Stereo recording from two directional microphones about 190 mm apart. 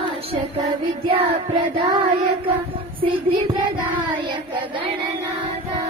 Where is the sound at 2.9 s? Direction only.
25° right (ahead or behind).